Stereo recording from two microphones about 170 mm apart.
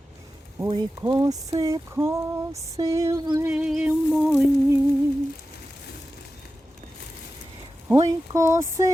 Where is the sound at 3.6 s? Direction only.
5° right (ahead or behind).